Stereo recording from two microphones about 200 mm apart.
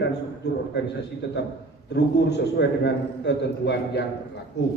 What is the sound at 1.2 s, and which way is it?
A man's voice, 60° left (ahead or behind).